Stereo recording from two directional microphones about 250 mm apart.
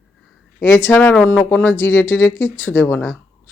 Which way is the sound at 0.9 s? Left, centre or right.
Centre.